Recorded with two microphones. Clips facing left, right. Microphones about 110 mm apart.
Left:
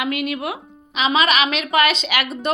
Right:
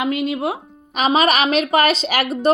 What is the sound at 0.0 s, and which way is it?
Speech, 30° right (ahead or behind).